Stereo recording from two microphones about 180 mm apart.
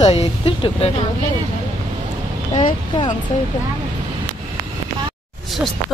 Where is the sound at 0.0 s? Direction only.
35° left (ahead or behind).